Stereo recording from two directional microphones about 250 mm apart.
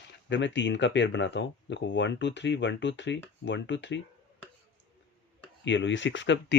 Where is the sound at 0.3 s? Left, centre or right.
Left.